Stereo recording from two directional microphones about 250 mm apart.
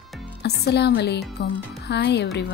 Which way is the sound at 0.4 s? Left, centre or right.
Left.